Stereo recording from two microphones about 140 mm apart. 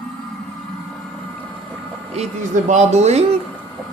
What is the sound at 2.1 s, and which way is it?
Speech, 60° right (ahead or behind).